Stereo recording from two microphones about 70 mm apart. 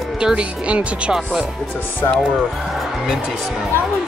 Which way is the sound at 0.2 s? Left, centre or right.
Centre.